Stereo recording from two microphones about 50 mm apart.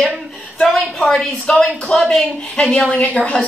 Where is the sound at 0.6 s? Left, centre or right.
Centre.